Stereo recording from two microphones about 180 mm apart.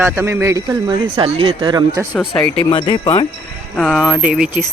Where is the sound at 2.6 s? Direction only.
25° left (ahead or behind).